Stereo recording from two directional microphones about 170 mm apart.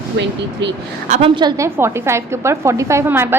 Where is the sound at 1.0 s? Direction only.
45° right (ahead or behind).